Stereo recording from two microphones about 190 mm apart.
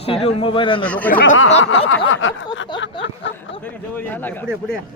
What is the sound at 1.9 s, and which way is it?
Speech, 90° left.